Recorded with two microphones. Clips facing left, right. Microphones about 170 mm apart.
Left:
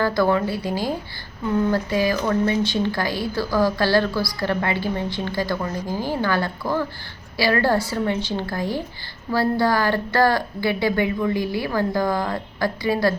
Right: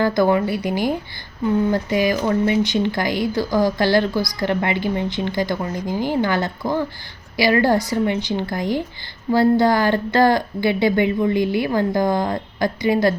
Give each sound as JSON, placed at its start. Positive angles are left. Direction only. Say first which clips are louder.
{"t": 0.0, "sound": "a woman's voice", "louder": "right 3 dB", "side_deg": -20}